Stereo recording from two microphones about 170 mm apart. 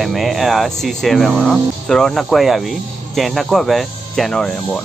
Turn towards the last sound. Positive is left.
turn(degrees=5)  # may be behind; listen again after turning